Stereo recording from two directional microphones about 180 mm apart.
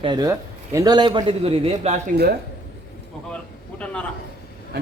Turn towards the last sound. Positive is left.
turn(degrees=5)  # may be behind; listen again after turning